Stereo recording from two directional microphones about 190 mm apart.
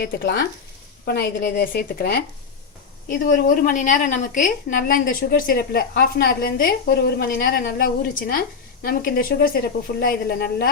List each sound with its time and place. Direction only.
0.0 s a woman's voice: 65° left (ahead or behind)